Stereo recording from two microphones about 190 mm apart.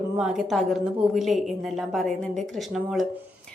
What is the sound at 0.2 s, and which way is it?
A woman's voice, centre (ahead or behind).